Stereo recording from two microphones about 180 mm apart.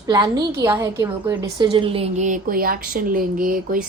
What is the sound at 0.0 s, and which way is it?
A woman's voice, 20° right (ahead or behind).